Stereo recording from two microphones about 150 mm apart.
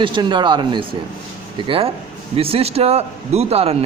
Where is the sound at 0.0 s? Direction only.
30° right (ahead or behind).